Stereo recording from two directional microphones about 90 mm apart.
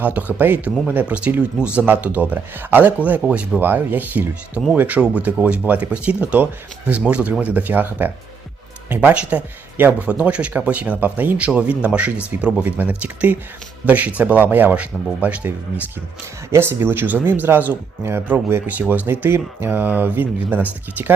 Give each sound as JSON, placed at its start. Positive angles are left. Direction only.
{"t": 0.0, "sound": "speech", "side_deg": -20}